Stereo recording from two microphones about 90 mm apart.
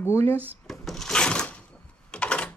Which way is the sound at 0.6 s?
5° left (ahead or behind).